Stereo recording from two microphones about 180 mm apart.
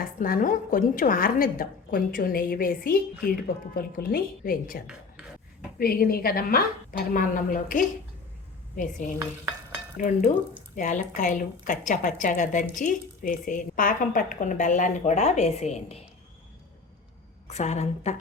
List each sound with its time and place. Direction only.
0.0 s a woman's voice: 50° left (ahead or behind)
5.8 s a woman's voice: 55° left (ahead or behind); by 16.0 s 35° left (ahead or behind)
17.5 s a woman's voice: 40° left (ahead or behind)